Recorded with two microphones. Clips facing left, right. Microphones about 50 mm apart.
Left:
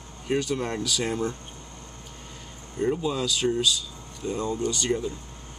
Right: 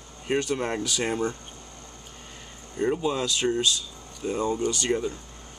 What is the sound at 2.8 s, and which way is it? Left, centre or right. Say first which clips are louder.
Speech: right 1 dB; centre.